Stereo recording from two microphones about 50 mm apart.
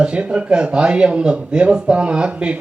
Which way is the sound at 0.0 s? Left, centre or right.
Centre.